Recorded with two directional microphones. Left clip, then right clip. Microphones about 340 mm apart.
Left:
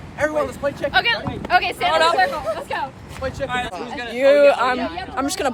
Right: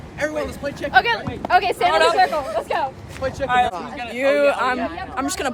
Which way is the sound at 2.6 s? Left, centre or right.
Right.